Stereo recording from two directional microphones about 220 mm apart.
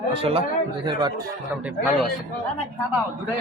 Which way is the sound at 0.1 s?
25° right (ahead or behind).